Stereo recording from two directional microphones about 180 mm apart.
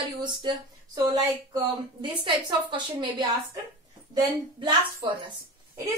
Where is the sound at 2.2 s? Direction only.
25° right (ahead or behind).